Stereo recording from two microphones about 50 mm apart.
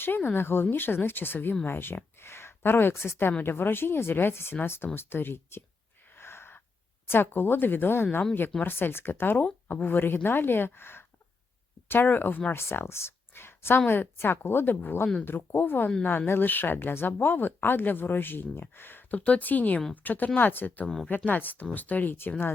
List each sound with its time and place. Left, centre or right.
0.0 s speech: left
2.2 s speech: left
6.1 s gasp: left
7.1 s speech: left
9.4 s speech: left
12.5 s speech: left
19.1 s speech: left